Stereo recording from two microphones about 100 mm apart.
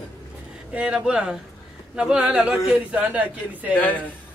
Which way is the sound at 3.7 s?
15° left (ahead or behind).